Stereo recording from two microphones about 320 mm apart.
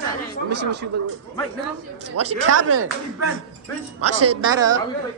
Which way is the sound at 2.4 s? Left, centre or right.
Right.